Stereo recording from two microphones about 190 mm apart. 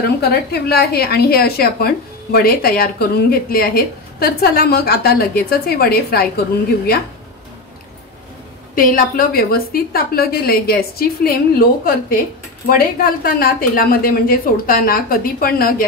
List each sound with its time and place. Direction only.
0.2 s a woman's voice: 60° left (ahead or behind)
8.7 s speech: 45° left (ahead or behind)